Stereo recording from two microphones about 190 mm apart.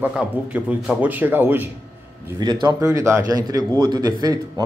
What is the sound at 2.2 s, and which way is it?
A man's voice, 20° right (ahead or behind).